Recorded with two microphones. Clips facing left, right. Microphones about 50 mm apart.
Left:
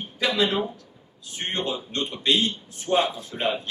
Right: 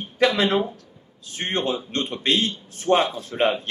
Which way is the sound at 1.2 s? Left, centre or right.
Right.